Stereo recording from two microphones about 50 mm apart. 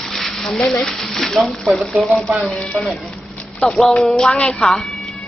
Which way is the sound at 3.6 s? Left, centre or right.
Centre.